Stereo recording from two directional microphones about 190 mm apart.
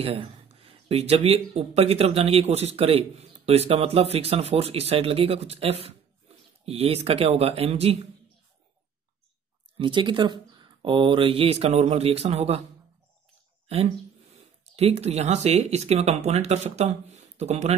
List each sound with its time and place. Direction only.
0.0 s speech: 30° right (ahead or behind)
9.8 s speech: 25° right (ahead or behind)
14.6 s speech: 35° right (ahead or behind)